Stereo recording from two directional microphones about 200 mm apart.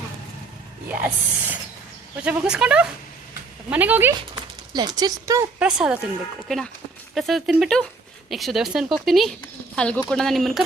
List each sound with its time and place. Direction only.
0.9 s speech: 10° right (ahead or behind)
4.7 s speech: 20° right (ahead or behind)
5.5 s speech: 5° right (ahead or behind)